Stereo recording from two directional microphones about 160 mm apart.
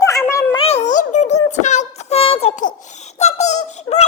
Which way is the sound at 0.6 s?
40° left (ahead or behind).